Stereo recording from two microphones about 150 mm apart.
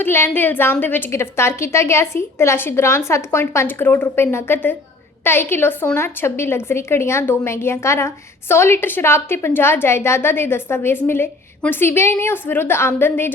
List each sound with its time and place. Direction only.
0.0 s a woman's voice: 15° left (ahead or behind)